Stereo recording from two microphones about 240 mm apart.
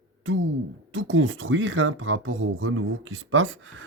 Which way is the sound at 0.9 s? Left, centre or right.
Right.